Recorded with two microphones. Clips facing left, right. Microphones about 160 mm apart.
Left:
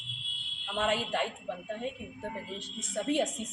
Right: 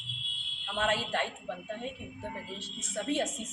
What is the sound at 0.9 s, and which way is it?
Speech, 15° left (ahead or behind).